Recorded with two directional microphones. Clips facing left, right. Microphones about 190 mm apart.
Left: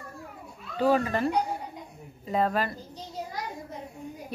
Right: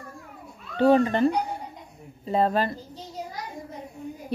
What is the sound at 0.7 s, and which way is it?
Speech, 25° right (ahead or behind).